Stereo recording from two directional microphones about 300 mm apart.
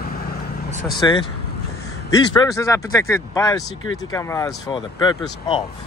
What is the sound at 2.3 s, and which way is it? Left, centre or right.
Speech, centre.